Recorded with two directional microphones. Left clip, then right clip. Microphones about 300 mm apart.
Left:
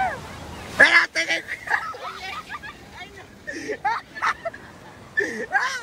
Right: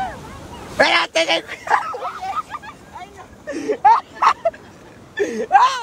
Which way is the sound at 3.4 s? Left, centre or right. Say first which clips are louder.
Right 6 dB; right.